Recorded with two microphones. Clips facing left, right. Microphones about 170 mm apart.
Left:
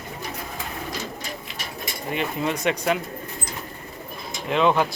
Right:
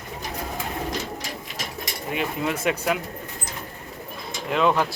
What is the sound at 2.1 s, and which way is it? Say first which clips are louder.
Speech: left 1 dB; 5° right (ahead or behind).